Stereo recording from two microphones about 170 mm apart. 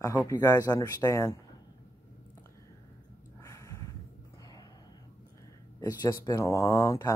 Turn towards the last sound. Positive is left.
turn(degrees=20)  # may be behind; listen again after turning